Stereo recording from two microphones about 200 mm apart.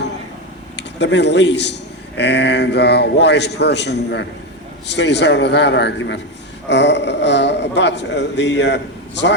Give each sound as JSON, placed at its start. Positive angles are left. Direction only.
{"t": 0.8, "sound": "a man's voice", "side_deg": 60}